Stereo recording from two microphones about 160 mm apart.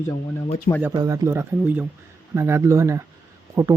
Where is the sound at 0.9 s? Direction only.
20° right (ahead or behind).